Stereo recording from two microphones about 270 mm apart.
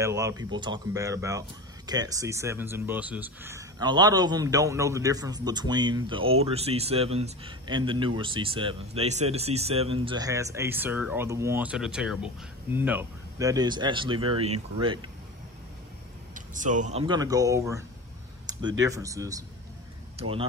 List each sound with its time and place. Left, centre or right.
0.0 s speech: centre
16.3 s speech: right